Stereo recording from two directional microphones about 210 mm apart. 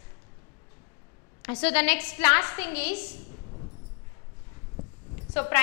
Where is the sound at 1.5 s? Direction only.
10° left (ahead or behind).